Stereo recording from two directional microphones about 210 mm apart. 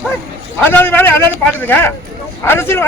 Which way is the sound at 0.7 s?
10° left (ahead or behind).